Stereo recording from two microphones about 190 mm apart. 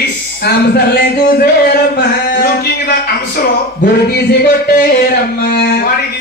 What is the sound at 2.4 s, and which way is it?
Music, 55° left (ahead or behind).